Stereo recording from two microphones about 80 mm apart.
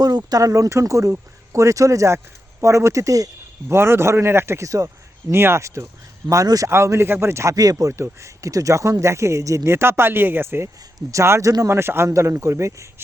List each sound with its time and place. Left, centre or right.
0.0 s speech: right
3.7 s speech: right
5.3 s speech: right
6.7 s speech: right